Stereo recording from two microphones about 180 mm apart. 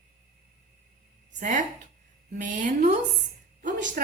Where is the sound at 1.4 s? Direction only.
45° right (ahead or behind).